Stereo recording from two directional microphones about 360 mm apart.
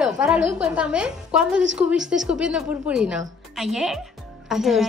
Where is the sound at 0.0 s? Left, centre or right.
Centre.